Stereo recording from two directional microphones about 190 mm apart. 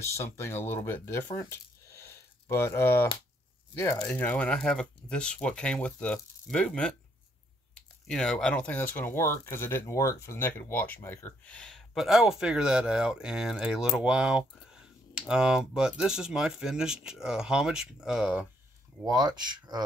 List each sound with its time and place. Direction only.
0.0 s speech: 15° left (ahead or behind); by 18.5 s 5° right (ahead or behind)
19.0 s speech: 20° right (ahead or behind)